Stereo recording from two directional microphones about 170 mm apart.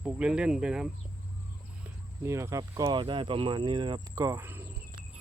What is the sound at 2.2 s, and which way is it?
Speech, 15° right (ahead or behind).